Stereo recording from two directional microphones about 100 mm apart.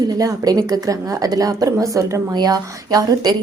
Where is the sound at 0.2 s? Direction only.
35° right (ahead or behind).